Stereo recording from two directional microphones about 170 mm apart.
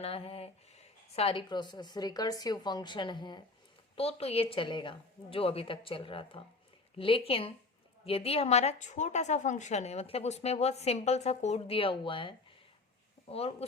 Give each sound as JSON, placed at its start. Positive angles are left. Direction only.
{"t": 0.0, "sound": "a woman's voice", "side_deg": 35}